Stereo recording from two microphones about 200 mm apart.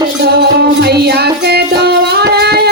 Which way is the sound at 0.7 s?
55° right (ahead or behind).